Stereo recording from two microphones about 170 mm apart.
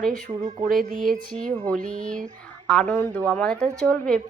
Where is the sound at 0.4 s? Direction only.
55° right (ahead or behind).